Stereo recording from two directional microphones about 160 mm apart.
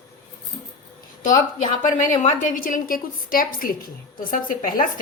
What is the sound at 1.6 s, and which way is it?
A woman's voice, 55° left (ahead or behind).